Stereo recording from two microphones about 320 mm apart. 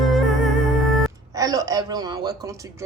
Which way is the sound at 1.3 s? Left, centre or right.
Centre.